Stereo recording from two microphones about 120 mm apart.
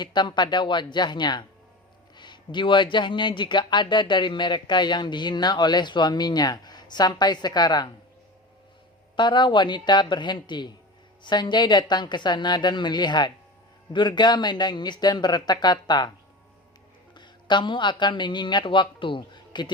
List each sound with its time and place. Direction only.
0.0 s speech: 40° left (ahead or behind)
9.1 s speech: 40° left (ahead or behind)
17.2 s speech: 40° left (ahead or behind)